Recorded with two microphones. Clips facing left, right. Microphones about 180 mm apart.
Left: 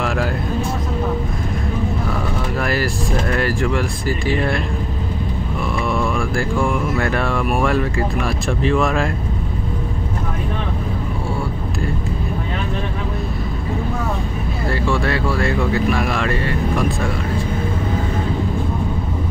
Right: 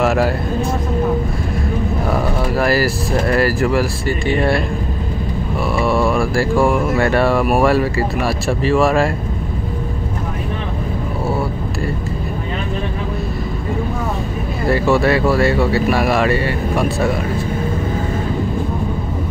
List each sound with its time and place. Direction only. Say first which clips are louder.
0.0 s vehicle: right 6 dB; 5° right (ahead or behind)
2.5 s speech: right 5 dB; 5° right (ahead or behind)
5.8 s speech: right 5 dB; 35° right (ahead or behind)
7.0 s speech: right 5 dB; centre (ahead or behind)
14.7 s speech: right 6 dB; 5° right (ahead or behind)